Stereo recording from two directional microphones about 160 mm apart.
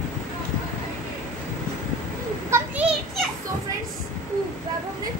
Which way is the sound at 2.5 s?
10° right (ahead or behind).